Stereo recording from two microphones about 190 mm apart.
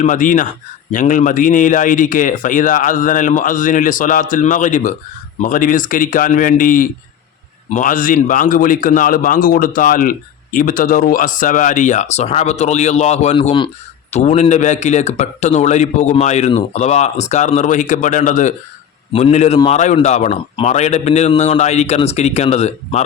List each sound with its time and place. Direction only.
0.0 s a man's voice: 45° left (ahead or behind)